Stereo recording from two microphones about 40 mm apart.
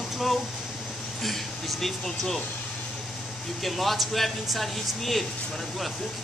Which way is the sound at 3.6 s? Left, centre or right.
Centre.